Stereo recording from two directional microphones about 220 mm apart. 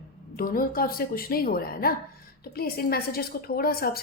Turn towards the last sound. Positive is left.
turn(degrees=45)  # may be behind; listen again after turning